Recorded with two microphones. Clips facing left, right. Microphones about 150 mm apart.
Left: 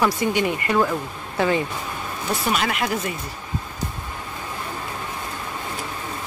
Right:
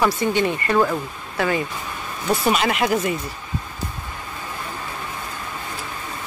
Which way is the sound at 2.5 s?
5° right (ahead or behind).